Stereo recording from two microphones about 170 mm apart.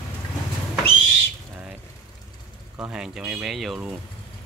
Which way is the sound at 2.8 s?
5° right (ahead or behind).